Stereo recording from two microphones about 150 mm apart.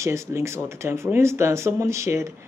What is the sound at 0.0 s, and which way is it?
A man's voice, 20° right (ahead or behind).